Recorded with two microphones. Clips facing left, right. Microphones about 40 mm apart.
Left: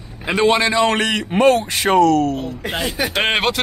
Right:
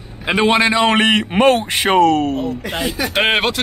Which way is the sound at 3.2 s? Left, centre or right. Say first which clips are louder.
Right 2 dB; centre.